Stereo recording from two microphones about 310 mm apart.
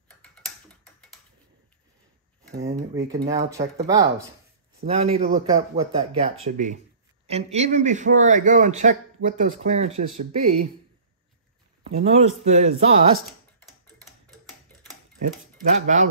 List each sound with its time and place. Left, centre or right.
0.2 s tick-tock: centre
2.7 s speech: centre
11.8 s speech: centre
13.6 s tick-tock: centre
15.1 s speech: right